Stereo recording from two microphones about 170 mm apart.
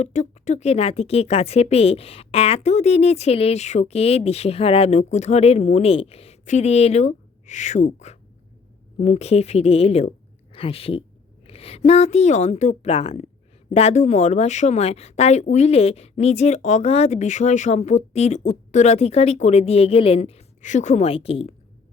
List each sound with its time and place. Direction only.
0.0 s a woman's voice: 45° left (ahead or behind)